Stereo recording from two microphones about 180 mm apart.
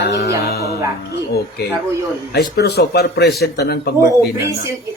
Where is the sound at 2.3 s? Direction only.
65° left (ahead or behind).